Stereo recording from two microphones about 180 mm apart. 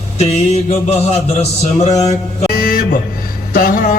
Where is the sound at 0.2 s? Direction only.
35° left (ahead or behind).